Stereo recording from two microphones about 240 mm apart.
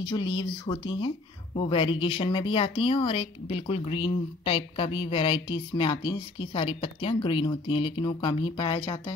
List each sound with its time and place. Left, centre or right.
0.0 s speech: centre